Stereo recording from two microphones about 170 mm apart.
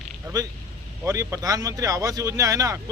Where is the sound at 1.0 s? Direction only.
20° right (ahead or behind).